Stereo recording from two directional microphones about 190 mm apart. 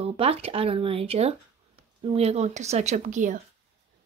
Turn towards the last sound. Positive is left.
turn(degrees=-40)  # may be behind; listen again after turning